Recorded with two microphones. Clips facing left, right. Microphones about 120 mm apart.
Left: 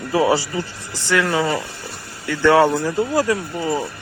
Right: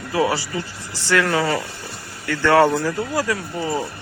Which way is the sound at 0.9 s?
15° left (ahead or behind).